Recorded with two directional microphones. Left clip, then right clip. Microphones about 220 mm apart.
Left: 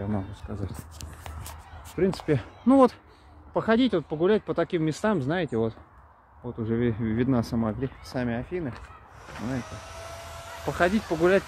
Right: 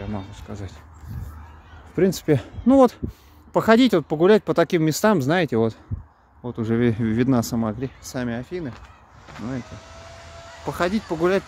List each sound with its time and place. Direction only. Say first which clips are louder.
0.0 s speech: even; centre (ahead or behind)
2.0 s speech: right 6 dB; 40° right (ahead or behind)
3.5 s speech: right 7 dB; 45° right (ahead or behind); by 8.7 s 30° right (ahead or behind)
9.6 s vehicle: even; 50° left (ahead or behind)
10.6 s speech: right 1 dB; 30° right (ahead or behind)